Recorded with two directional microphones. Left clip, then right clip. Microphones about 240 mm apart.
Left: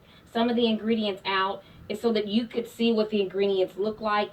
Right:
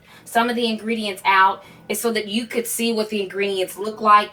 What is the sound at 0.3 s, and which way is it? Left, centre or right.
Speech, right.